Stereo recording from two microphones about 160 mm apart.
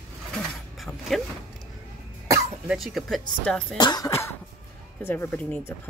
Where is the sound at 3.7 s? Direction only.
25° left (ahead or behind); by 5.8 s 10° left (ahead or behind).